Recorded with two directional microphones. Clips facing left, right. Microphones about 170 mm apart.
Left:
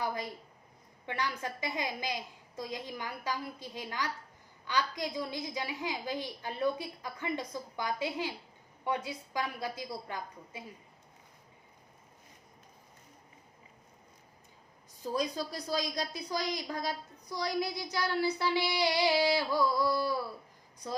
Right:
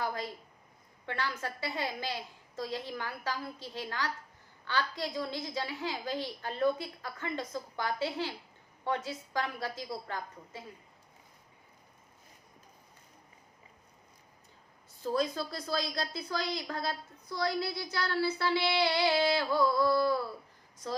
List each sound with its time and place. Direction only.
0.0 s a woman's voice: 15° left (ahead or behind)
14.9 s a woman's voice: 15° left (ahead or behind)